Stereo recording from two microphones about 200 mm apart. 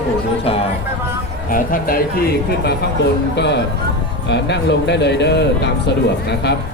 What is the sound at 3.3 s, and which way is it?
Speech, 60° left (ahead or behind).